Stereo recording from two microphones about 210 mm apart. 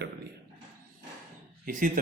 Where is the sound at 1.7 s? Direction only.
40° right (ahead or behind).